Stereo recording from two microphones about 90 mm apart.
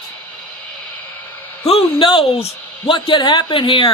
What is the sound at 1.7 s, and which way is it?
A man's voice, 65° left (ahead or behind).